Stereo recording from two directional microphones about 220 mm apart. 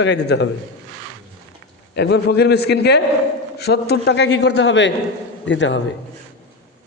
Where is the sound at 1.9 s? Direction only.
50° left (ahead or behind).